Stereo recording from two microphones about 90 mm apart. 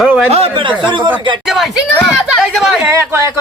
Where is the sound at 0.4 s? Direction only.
65° right (ahead or behind).